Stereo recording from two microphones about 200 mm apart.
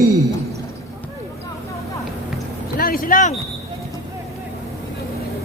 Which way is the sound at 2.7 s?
45° left (ahead or behind).